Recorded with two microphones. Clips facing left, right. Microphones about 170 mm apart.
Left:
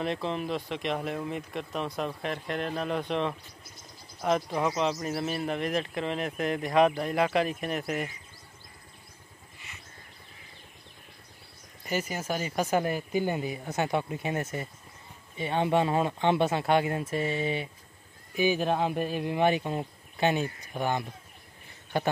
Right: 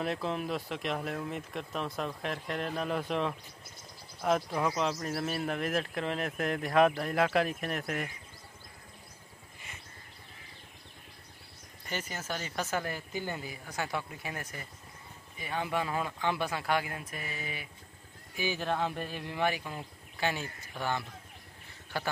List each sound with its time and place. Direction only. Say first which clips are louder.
0.0 s speech: left 2 dB; centre (ahead or behind)
11.8 s speech: left 7 dB; 10° left (ahead or behind)